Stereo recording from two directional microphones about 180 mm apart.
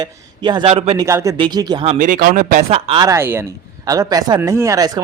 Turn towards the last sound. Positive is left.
turn(degrees=-15)  # may be behind; listen again after turning